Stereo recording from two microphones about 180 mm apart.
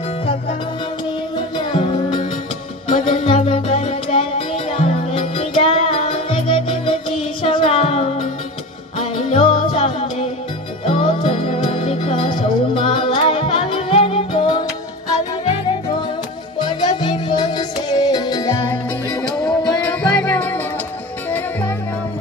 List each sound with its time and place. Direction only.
1.3 s music: 30° left (ahead or behind)
16.5 s music: 25° left (ahead or behind)
19.2 s music: 5° left (ahead or behind)